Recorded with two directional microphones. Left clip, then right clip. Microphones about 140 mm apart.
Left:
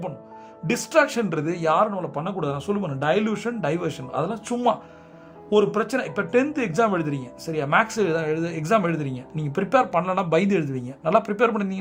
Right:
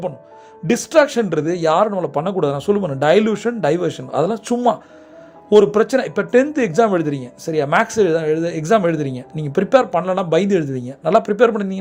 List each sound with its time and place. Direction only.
0.7 s speech: 25° right (ahead or behind)
4.1 s speech: 35° right (ahead or behind)